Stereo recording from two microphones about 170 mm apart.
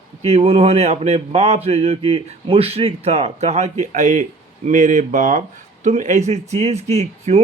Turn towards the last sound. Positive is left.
turn(degrees=-40)  # may be behind; listen again after turning